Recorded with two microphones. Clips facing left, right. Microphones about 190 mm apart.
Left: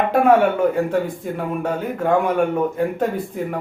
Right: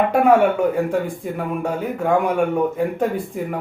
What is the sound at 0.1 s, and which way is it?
Speech, 5° right (ahead or behind).